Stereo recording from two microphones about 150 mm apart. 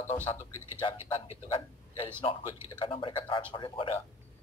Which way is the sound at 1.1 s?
35° left (ahead or behind).